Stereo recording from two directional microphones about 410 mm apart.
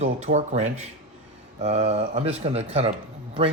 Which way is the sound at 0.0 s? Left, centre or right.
Centre.